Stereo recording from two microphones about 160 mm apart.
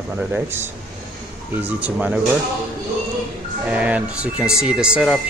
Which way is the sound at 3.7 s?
10° right (ahead or behind).